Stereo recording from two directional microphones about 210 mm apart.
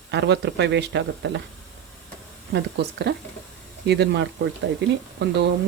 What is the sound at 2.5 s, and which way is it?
Speech, 50° right (ahead or behind).